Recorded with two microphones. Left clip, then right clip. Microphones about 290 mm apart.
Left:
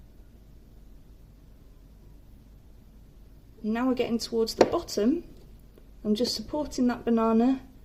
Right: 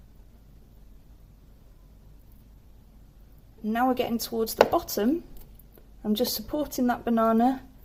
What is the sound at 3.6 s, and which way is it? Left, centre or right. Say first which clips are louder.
Speech: right 3 dB; right.